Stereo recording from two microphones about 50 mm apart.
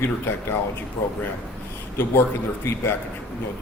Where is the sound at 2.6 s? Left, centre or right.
Left.